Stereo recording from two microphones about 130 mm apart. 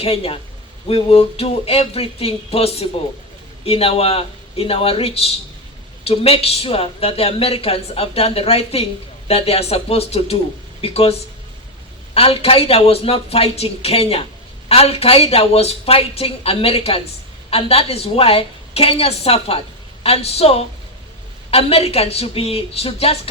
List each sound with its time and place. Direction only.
0.0 s a woman's voice: 45° left (ahead or behind)
12.1 s a woman's voice: 50° left (ahead or behind)